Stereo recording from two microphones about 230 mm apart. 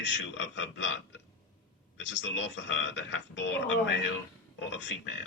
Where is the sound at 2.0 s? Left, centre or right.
Left.